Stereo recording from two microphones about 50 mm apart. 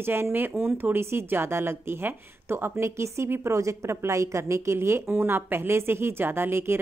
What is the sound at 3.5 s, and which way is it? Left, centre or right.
A woman's voice, right.